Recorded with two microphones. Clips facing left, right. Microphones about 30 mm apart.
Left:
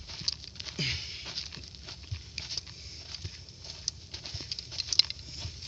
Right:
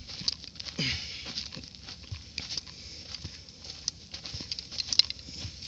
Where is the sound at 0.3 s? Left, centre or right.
Right.